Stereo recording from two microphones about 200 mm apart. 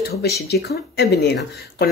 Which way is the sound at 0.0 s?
55° left (ahead or behind).